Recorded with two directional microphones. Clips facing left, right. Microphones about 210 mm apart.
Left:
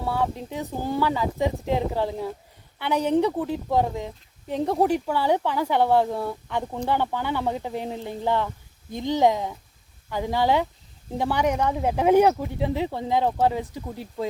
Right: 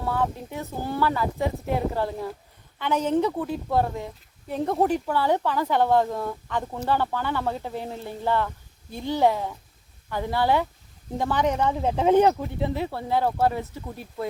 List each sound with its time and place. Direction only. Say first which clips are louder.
0.0 s speech: left 1 dB; 15° left (ahead or behind)